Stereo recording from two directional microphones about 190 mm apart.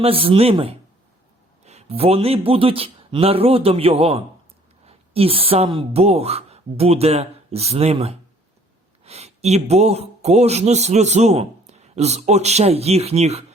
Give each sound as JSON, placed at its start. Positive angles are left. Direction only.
{"t": 0.0, "sound": "a man's voice", "side_deg": -30}